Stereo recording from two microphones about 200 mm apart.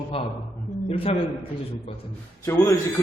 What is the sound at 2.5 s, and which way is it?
Speech, 15° left (ahead or behind).